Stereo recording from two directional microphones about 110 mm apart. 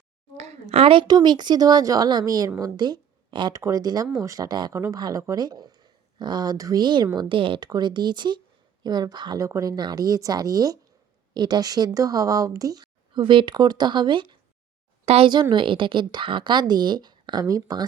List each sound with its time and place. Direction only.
0.3 s a sound: 90° right; by 1.0 s 60° right (ahead or behind)
1.0 s speech: 40° right (ahead or behind)
3.5 s speech: 30° right (ahead or behind)
4.7 s a woman's voice: 25° right (ahead or behind); by 14.3 s 45° right (ahead or behind)
15.0 s a woman's voice: 70° right (ahead or behind)
15.3 s a woman's voice: 45° right (ahead or behind)